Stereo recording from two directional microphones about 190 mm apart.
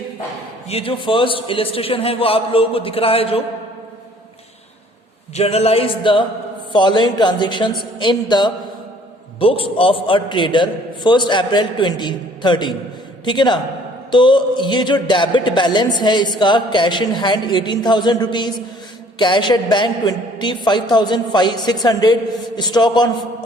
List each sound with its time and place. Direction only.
0.7 s speech: 30° left (ahead or behind)
5.3 s a sound: 35° left (ahead or behind)
6.7 s speech: 25° left (ahead or behind)